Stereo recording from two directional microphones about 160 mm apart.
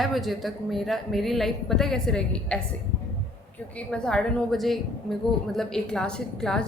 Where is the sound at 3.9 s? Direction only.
5° left (ahead or behind).